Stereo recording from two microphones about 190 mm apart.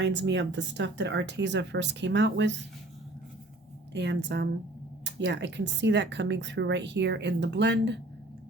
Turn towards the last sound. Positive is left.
turn(degrees=-65)  # may be behind; listen again after turning